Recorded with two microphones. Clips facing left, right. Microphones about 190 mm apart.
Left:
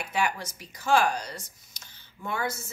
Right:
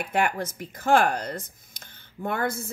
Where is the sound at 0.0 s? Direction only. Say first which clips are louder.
Right 4 dB; 55° right (ahead or behind).